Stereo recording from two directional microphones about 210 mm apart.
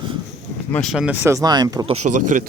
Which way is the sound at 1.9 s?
35° right (ahead or behind).